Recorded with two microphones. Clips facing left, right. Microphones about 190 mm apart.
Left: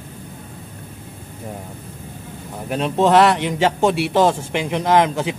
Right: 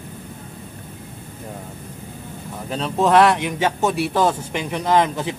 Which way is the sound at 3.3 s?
65° left (ahead or behind).